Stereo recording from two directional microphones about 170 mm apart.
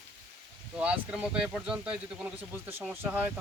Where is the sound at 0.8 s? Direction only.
5° right (ahead or behind).